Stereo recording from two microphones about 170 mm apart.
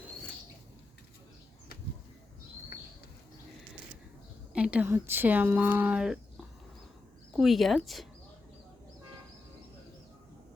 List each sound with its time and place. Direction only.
4.5 s speech: 5° right (ahead or behind)
7.3 s speech: centre (ahead or behind)